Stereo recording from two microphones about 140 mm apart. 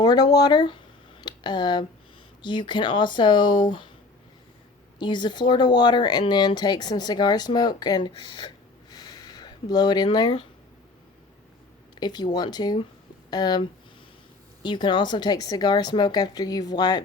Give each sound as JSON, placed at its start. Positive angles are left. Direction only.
{"t": 0.0, "sound": "speech", "side_deg": 30}
{"t": 1.2, "sound": "a sound", "side_deg": 30}
{"t": 2.4, "sound": "speech", "side_deg": 35}
{"t": 4.9, "sound": "speech", "side_deg": 35}
{"t": 8.3, "sound": "a sound", "side_deg": 30}
{"t": 11.9, "sound": "speech", "side_deg": 30}